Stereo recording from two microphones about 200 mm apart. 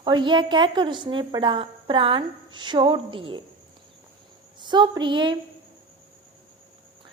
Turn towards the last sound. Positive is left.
turn(degrees=-25)  # may be behind; listen again after turning